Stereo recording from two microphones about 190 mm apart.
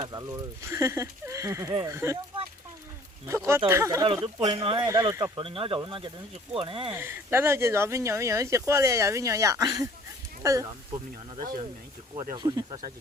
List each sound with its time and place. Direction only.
0.0 s speech: 20° right (ahead or behind)
3.2 s speech: 15° right (ahead or behind)
5.4 s speech: 30° right (ahead or behind)
6.9 s speech: 15° right (ahead or behind)
12.1 s speech: 40° right (ahead or behind)
12.4 s speech: 20° right (ahead or behind)